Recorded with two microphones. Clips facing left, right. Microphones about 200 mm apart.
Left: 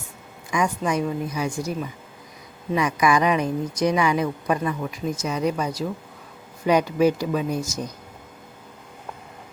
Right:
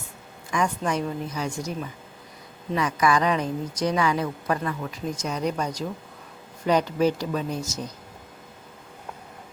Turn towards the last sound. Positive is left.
turn(degrees=10)  # may be behind; listen again after turning